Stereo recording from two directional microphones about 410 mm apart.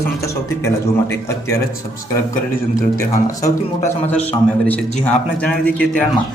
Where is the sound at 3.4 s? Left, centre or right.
Centre.